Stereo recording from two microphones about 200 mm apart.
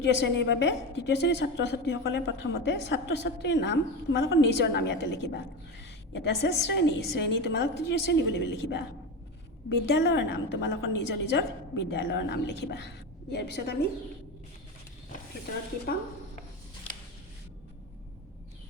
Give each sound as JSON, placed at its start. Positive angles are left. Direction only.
{"t": 0.0, "sound": "a woman's voice", "side_deg": 60}